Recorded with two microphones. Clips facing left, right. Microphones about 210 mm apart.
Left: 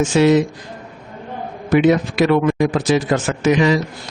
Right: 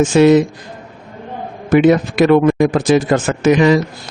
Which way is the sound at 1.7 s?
50° right (ahead or behind).